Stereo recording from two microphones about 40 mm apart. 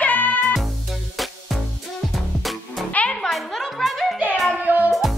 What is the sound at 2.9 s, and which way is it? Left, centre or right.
Music, left.